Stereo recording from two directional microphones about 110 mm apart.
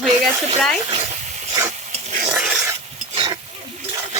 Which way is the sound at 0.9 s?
70° right (ahead or behind).